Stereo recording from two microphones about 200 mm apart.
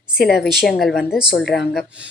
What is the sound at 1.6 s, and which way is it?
Speech, 55° left (ahead or behind).